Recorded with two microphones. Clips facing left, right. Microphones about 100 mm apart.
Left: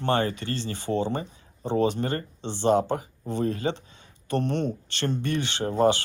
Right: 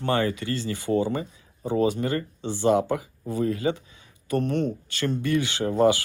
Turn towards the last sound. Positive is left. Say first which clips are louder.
# right 1 dB
turn(degrees=25)  # may be behind; listen again after turning